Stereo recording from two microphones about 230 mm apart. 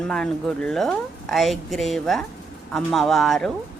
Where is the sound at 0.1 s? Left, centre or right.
Centre.